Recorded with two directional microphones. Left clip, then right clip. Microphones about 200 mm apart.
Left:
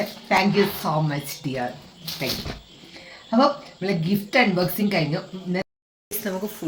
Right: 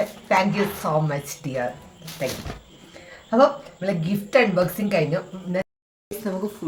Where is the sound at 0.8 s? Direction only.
20° right (ahead or behind).